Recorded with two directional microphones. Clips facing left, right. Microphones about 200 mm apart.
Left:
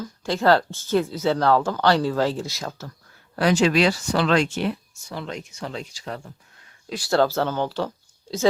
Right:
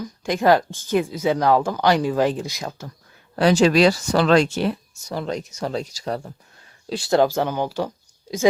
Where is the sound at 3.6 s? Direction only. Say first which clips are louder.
Right 4 dB; 40° right (ahead or behind).